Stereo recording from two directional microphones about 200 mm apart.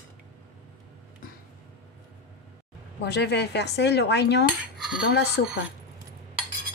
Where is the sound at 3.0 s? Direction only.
55° left (ahead or behind).